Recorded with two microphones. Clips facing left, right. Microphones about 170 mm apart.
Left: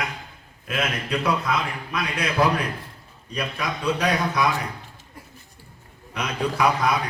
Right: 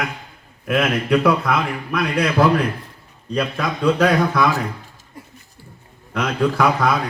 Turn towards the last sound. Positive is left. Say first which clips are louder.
# right 4 dB
turn(degrees=-55)  # may be behind; listen again after turning